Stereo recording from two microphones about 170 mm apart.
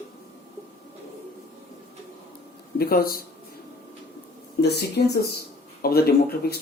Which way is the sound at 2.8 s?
65° left (ahead or behind).